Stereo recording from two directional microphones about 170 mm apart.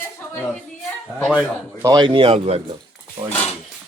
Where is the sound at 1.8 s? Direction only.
25° right (ahead or behind).